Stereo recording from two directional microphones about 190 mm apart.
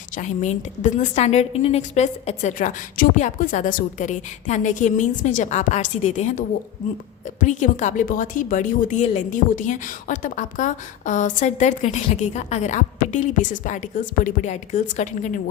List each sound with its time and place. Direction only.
0.2 s a woman's voice: 40° left (ahead or behind)